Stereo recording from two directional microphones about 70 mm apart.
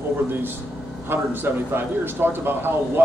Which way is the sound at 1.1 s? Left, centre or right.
Right.